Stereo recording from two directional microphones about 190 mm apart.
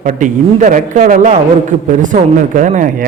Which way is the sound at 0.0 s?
40° right (ahead or behind).